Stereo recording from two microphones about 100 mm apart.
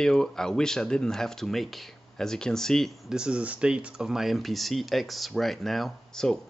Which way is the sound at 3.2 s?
10° right (ahead or behind).